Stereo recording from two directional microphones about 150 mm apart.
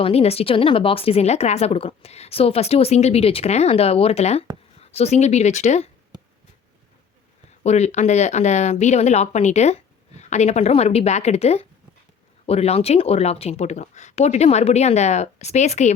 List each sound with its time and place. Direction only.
0.0 s speech: 40° left (ahead or behind)
7.6 s speech: 45° left (ahead or behind)